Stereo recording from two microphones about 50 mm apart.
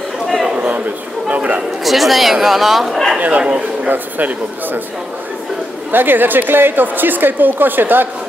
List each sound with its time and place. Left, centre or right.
0.6 s a sound: right
1.8 s speech: centre
3.2 s a woman's voice: right
5.9 s a woman's voice: right